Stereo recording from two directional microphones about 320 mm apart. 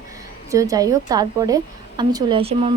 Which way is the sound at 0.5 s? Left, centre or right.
Centre.